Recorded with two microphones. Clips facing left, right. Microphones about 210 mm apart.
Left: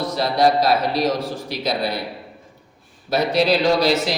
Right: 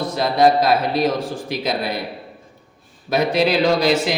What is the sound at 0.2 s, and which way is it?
Speech, 55° right (ahead or behind).